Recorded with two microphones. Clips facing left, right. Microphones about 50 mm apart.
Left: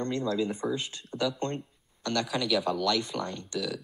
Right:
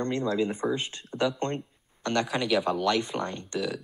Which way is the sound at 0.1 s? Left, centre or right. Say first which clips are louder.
Right 2 dB; right.